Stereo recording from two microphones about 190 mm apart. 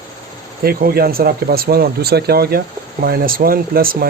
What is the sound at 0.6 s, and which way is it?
Speech, 55° right (ahead or behind).